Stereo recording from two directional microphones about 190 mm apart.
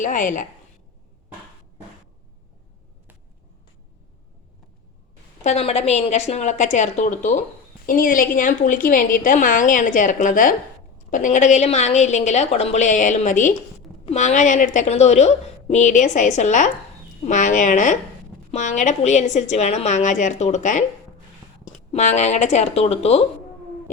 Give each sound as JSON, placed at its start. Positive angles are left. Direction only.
{"t": 0.0, "sound": "a woman's voice", "side_deg": 40}
{"t": 5.4, "sound": "a woman's voice", "side_deg": 35}
{"t": 21.9, "sound": "a woman's voice", "side_deg": 40}